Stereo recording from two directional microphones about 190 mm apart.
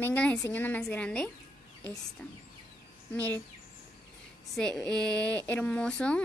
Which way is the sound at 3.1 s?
10° left (ahead or behind).